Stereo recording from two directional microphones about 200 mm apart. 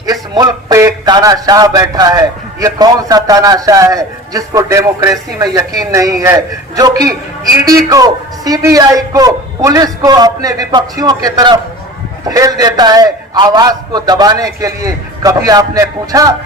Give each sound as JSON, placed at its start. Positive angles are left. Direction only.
{"t": 0.0, "sound": "a man's voice", "side_deg": -20}